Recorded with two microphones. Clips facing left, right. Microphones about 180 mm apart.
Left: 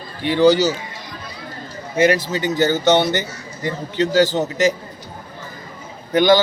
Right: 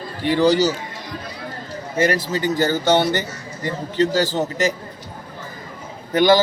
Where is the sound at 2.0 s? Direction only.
35° right (ahead or behind).